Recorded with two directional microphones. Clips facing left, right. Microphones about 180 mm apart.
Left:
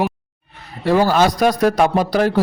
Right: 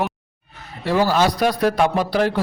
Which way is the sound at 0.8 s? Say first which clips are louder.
Left 3 dB; 50° left (ahead or behind).